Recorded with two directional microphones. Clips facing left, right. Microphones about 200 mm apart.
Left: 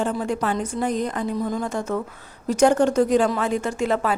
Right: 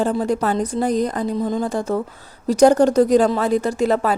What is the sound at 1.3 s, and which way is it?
A woman's voice, 25° right (ahead or behind).